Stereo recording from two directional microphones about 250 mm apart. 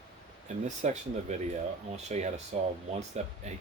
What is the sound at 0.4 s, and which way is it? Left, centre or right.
Speech, right.